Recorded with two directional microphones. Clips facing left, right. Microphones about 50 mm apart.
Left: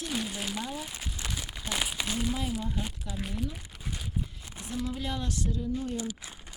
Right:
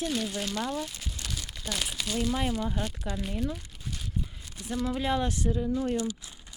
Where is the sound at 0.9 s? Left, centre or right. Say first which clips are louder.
Left 1 dB; left.